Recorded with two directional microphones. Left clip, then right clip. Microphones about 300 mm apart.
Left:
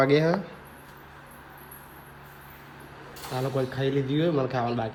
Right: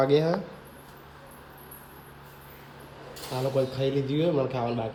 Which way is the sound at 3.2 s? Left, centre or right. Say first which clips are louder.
Right 2 dB; centre.